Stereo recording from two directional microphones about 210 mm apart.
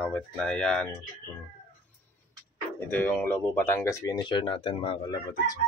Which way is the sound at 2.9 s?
10° left (ahead or behind).